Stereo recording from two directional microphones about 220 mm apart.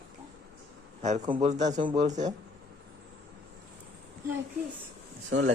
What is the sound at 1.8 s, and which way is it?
Speech, 20° right (ahead or behind).